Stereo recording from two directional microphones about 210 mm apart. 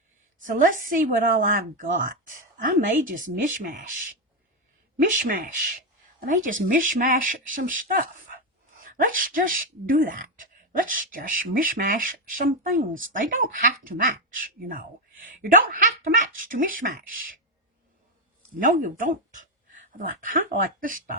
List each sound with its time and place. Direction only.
0.4 s speech: 40° right (ahead or behind)
18.6 s speech: 40° right (ahead or behind)